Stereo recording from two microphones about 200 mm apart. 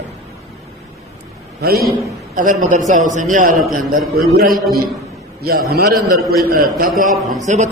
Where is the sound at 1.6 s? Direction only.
50° right (ahead or behind).